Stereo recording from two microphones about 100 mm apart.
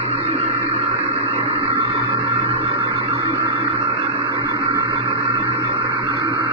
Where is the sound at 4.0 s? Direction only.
90° right.